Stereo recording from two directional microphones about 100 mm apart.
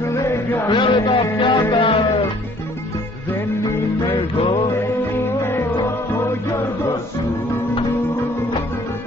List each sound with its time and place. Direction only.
0.0 s music: 25° left (ahead or behind)
0.7 s a man's voice: 55° left (ahead or behind)
1.4 s music: 50° left (ahead or behind)
4.1 s music: 65° left (ahead or behind)
4.6 s music: 25° left (ahead or behind)